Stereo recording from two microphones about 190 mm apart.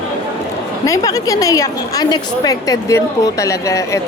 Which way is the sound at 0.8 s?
20° left (ahead or behind).